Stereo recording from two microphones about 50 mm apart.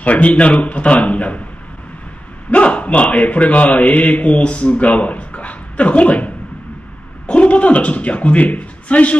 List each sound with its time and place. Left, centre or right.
0.0 s speech: left
2.5 s a man's voice: left